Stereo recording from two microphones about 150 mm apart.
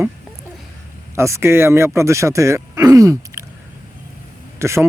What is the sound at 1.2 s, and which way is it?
Speech, 20° right (ahead or behind).